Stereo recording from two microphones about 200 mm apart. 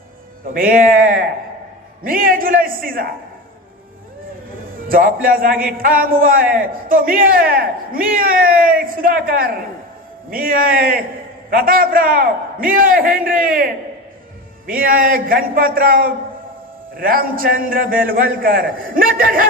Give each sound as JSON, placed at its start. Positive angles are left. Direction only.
{"t": 0.5, "sound": "a man's voice", "side_deg": -45}
{"t": 4.9, "sound": "a man's voice", "side_deg": -45}
{"t": 14.7, "sound": "a man's voice", "side_deg": -45}